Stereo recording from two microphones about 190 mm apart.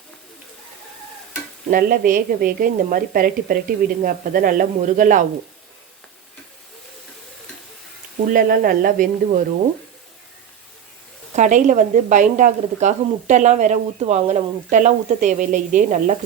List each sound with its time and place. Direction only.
1.7 s a woman's voice: 45° right (ahead or behind)
8.3 s a woman's voice: 50° right (ahead or behind)
11.3 s speech: 40° right (ahead or behind)